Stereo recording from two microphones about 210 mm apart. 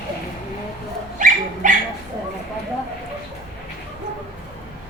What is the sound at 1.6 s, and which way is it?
Bow-wow, 40° right (ahead or behind).